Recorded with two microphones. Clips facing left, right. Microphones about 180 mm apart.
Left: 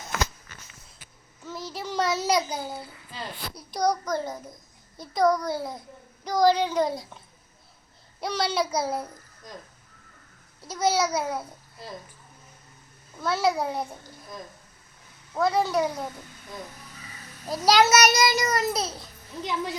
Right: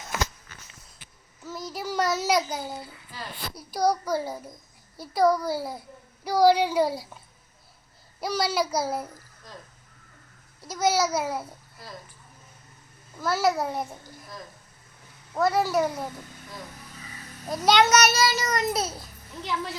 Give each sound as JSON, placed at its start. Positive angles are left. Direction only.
{"t": 1.5, "sound": "child singing", "side_deg": 0}
{"t": 3.5, "sound": "a child's voice", "side_deg": -5}
{"t": 8.2, "sound": "a child's voice", "side_deg": -5}
{"t": 10.6, "sound": "a child's voice", "side_deg": 0}
{"t": 11.8, "sound": "speech", "side_deg": 20}
{"t": 13.1, "sound": "a child's voice", "side_deg": 0}
{"t": 15.4, "sound": "a child's voice", "side_deg": -5}
{"t": 17.5, "sound": "a child's voice", "side_deg": 0}
{"t": 19.4, "sound": "speech", "side_deg": 20}